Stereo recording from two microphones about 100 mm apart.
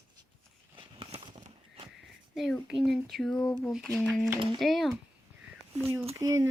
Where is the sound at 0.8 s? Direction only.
60° right (ahead or behind).